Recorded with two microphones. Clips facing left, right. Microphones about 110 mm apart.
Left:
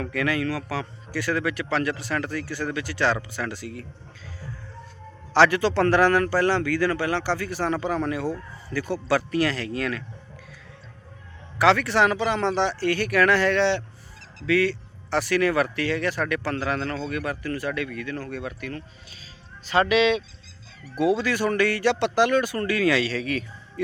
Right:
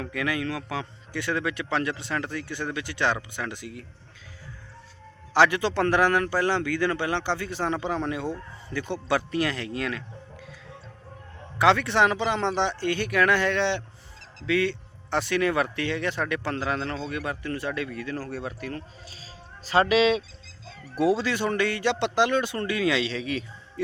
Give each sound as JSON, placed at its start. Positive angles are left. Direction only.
{"t": 0.0, "sound": "a man's voice", "side_deg": -20}
{"t": 5.3, "sound": "a man's voice", "side_deg": -15}
{"t": 11.5, "sound": "a man's voice", "side_deg": -25}